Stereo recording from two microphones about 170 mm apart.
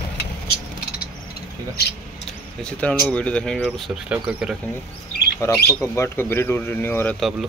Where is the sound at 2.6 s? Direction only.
5° left (ahead or behind).